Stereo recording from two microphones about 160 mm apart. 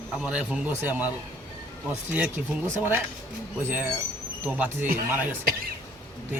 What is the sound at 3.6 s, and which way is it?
Speech, 10° right (ahead or behind).